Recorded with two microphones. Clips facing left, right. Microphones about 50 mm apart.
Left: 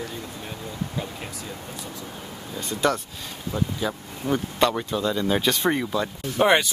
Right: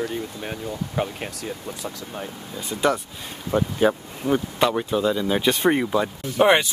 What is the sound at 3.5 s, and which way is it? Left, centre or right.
Speech, right.